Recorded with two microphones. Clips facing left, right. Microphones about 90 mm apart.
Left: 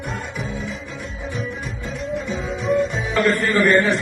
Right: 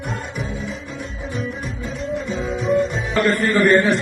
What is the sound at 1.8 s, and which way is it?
Music, centre (ahead or behind).